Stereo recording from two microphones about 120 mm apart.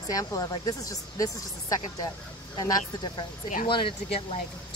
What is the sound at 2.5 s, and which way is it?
Speech, 35° left (ahead or behind).